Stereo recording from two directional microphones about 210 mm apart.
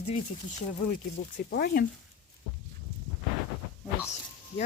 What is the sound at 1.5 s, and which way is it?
Speech, 45° left (ahead or behind).